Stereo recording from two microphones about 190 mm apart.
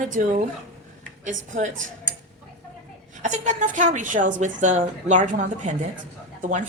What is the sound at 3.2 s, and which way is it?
A woman's voice, 40° right (ahead or behind).